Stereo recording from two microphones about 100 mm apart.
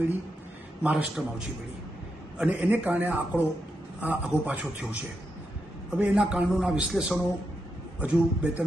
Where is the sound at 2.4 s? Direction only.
15° right (ahead or behind).